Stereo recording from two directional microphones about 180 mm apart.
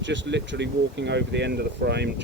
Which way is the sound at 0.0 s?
90° right.